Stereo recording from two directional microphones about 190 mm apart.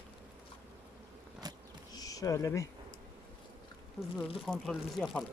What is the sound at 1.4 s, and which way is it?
Insect, 20° right (ahead or behind).